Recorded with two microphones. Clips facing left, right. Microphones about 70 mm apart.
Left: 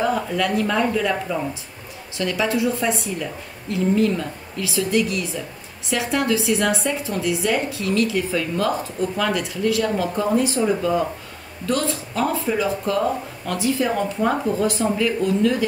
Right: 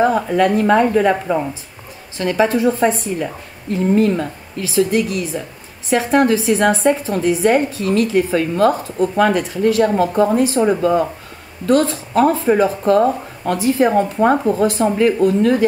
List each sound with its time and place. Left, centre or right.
0.0 s a woman's voice: right